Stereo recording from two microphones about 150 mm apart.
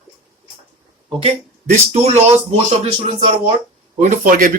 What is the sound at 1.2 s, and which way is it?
Speech, 50° right (ahead or behind).